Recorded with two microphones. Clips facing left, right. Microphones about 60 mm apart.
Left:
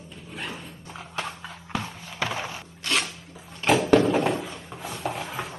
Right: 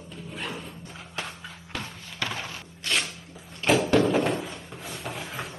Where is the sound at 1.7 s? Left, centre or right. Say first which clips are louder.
Left 4 dB; centre.